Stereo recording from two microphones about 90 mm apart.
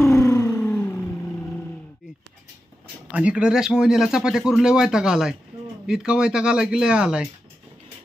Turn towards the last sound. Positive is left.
turn(degrees=-10)  # may be behind; listen again after turning